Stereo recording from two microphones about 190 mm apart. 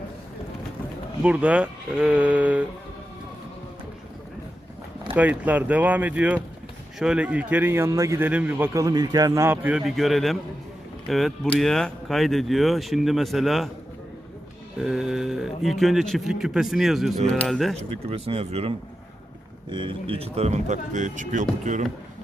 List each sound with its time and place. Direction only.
1.2 s a man's voice: 5° right (ahead or behind)
5.1 s a man's voice: 10° right (ahead or behind)
14.8 s speech: centre (ahead or behind)
17.7 s speech: 30° right (ahead or behind)
19.7 s speech: 25° right (ahead or behind)